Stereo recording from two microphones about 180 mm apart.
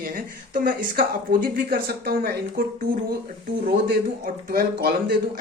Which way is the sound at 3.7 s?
60° right (ahead or behind).